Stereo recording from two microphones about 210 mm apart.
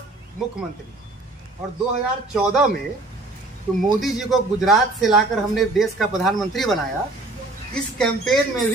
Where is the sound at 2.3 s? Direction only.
Centre (ahead or behind).